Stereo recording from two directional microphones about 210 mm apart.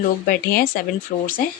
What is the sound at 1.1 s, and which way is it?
Speech, 30° left (ahead or behind).